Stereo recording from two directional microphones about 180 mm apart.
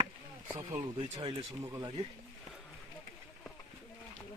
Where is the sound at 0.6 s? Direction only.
25° right (ahead or behind).